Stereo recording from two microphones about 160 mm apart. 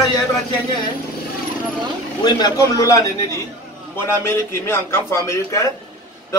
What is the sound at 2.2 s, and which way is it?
A man's voice, 25° left (ahead or behind).